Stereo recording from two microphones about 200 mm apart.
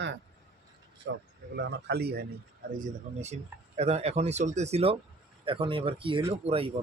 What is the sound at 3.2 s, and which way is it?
Speech, 30° right (ahead or behind).